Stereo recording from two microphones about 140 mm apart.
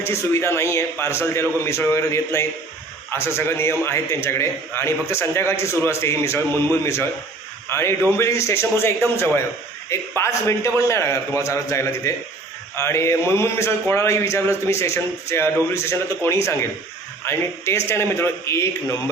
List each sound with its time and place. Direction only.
0.0 s a man's voice: 20° left (ahead or behind)